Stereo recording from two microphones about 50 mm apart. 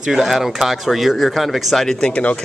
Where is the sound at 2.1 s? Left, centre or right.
Left.